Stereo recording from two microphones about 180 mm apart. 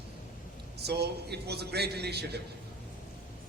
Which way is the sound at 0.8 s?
65° right (ahead or behind).